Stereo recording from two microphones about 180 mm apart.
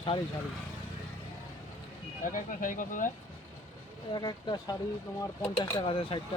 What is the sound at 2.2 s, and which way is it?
Speech, 45° left (ahead or behind).